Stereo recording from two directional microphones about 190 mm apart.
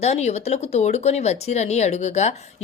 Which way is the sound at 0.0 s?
35° left (ahead or behind).